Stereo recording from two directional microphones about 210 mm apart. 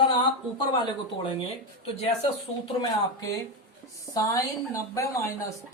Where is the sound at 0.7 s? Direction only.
20° left (ahead or behind).